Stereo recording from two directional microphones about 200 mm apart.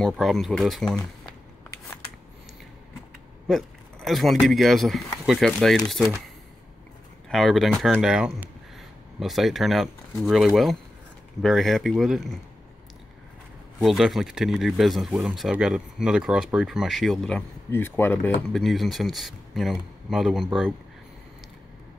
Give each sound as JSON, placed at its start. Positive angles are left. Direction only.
{"t": 0.0, "sound": "speech", "side_deg": 0}
{"t": 3.4, "sound": "speech", "side_deg": 0}
{"t": 13.8, "sound": "speech", "side_deg": 0}